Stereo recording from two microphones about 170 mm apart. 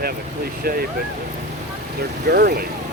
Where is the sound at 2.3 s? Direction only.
65° right (ahead or behind).